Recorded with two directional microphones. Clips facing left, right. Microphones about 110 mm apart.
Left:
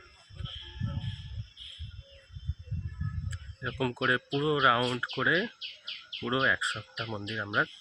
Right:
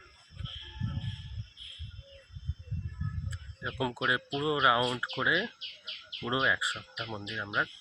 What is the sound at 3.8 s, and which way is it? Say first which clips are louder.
Speech: left 1 dB; 15° right (ahead or behind).